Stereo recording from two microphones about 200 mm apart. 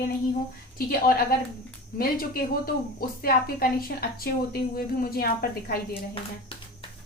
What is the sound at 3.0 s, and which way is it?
A woman's voice, 45° left (ahead or behind).